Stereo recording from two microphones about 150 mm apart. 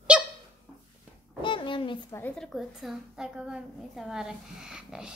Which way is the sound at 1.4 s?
35° left (ahead or behind).